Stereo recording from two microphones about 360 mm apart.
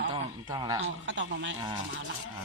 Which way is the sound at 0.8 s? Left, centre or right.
Right.